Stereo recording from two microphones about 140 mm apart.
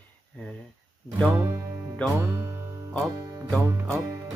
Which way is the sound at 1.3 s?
20° right (ahead or behind).